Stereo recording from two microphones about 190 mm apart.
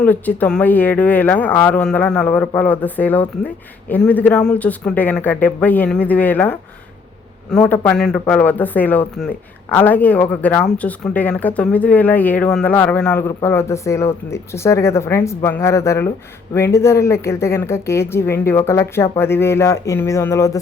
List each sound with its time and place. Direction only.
0.0 s speech: 10° left (ahead or behind)